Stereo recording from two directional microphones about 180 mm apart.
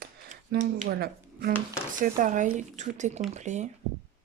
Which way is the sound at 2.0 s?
45° right (ahead or behind).